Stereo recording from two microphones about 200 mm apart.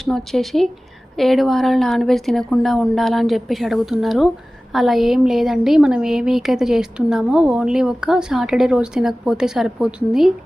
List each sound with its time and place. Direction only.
0.0 s speech: centre (ahead or behind)